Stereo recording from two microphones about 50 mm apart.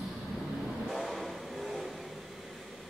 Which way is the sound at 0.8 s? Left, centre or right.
Centre.